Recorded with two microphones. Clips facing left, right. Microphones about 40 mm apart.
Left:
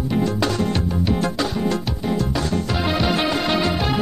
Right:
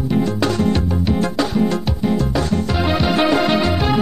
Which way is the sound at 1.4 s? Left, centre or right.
Right.